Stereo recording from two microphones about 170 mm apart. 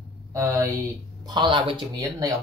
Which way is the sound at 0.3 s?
15° right (ahead or behind).